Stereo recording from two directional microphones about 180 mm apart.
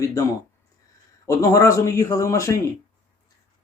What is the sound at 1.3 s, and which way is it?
Speech, 20° left (ahead or behind).